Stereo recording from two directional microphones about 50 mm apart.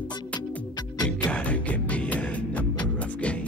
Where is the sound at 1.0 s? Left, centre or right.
Left.